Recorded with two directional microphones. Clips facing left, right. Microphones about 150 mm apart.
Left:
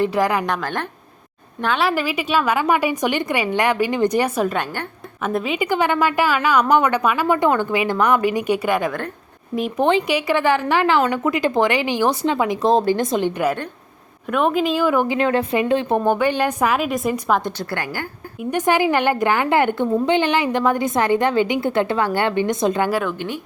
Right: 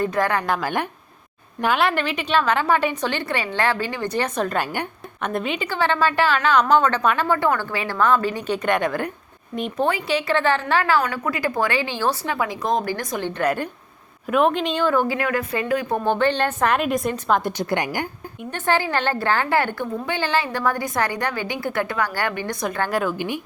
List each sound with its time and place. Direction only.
0.2 s a woman's voice: 10° left (ahead or behind)
0.4 s a woman's voice: 5° right (ahead or behind)
1.9 s a woman's voice: 5° left (ahead or behind)
4.5 s a woman's voice: 10° right (ahead or behind)
5.2 s a woman's voice: 5° left (ahead or behind)
5.5 s a woman's voice: 15° left (ahead or behind)
9.7 s a woman's voice: 20° left (ahead or behind)
14.3 s a woman's voice: centre (ahead or behind); by 16.0 s 25° left (ahead or behind)
16.0 s a woman's voice: 10° left (ahead or behind)
17.6 s a woman's voice: 20° right (ahead or behind)
18.5 s a woman's voice: 15° left (ahead or behind)
22.9 s a woman's voice: centre (ahead or behind)
23.1 s a woman's voice: 10° right (ahead or behind)